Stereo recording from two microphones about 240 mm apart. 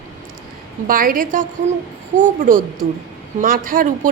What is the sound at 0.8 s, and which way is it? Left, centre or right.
A woman's voice, right.